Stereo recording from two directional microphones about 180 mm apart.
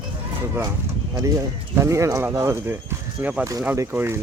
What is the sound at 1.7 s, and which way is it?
Speech, 15° right (ahead or behind).